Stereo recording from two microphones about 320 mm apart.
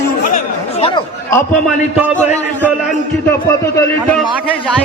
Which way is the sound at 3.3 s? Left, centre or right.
Centre.